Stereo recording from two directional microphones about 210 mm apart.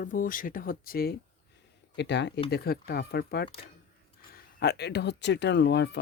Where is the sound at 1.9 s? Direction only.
55° left (ahead or behind).